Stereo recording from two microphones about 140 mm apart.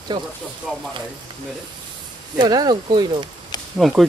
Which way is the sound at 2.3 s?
30° right (ahead or behind).